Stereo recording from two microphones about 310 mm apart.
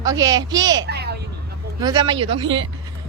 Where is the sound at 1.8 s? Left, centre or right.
Centre.